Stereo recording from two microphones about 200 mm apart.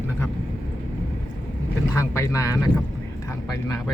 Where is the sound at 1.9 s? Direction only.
15° left (ahead or behind).